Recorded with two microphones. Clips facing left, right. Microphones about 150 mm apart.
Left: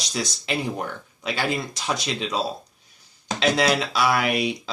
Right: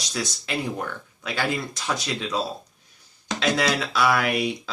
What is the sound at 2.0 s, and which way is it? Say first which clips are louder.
Speech: left 1 dB; 15° left (ahead or behind).